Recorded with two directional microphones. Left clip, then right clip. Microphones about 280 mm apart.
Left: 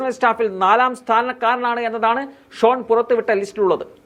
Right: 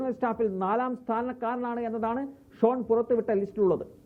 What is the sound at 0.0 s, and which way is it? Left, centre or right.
Speech, centre.